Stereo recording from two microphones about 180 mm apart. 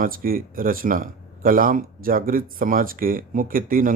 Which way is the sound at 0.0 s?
50° right (ahead or behind).